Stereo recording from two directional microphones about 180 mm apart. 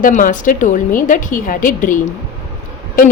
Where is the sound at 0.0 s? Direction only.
45° left (ahead or behind).